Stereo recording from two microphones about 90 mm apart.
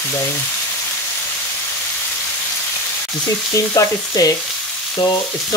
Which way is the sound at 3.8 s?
45° left (ahead or behind).